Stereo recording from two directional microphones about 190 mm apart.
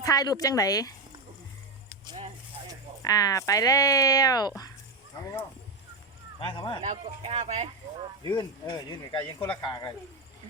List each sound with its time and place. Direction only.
0.0 s speech: 20° left (ahead or behind)
3.0 s speech: 20° left (ahead or behind)
6.8 s speech: 35° right (ahead or behind)
8.2 s speech: 20° left (ahead or behind)